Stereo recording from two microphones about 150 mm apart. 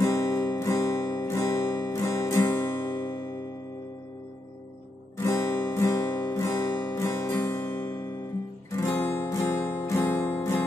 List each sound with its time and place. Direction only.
0.0 s guitar: 15° left (ahead or behind)
5.1 s guitar: 15° left (ahead or behind)
7.6 s music: 20° left (ahead or behind)